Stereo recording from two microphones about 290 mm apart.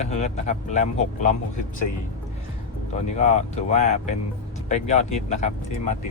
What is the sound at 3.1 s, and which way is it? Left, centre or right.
Speech, left.